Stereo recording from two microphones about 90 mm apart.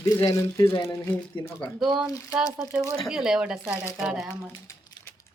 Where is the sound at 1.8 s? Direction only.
5° right (ahead or behind).